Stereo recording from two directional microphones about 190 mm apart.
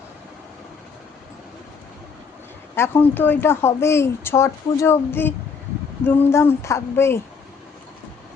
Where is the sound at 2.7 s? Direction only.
10° left (ahead or behind).